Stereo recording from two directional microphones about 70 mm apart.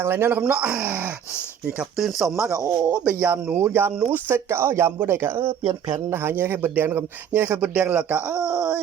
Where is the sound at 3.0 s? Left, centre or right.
Right; by 8.7 s centre.